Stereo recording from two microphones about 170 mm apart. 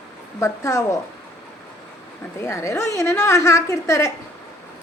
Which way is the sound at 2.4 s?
15° left (ahead or behind).